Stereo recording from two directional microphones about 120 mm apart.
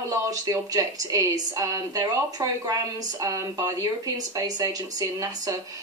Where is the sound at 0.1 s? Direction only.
25° right (ahead or behind).